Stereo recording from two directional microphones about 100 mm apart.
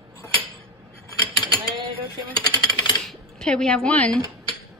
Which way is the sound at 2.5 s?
40° left (ahead or behind).